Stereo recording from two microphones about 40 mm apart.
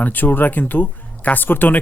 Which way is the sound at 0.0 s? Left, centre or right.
Left.